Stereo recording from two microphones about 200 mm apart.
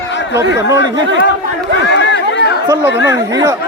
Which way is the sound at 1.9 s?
60° left (ahead or behind).